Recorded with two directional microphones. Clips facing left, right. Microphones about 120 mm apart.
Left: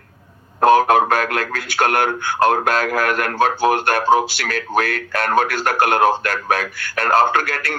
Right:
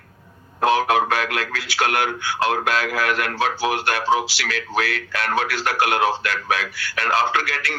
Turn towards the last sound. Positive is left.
turn(degrees=50)  # may be behind; listen again after turning